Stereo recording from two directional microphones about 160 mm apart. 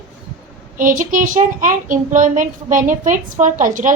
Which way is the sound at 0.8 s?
55° right (ahead or behind).